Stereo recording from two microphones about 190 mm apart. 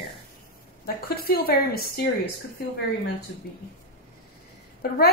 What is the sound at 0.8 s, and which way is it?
A woman's voice, 55° left (ahead or behind).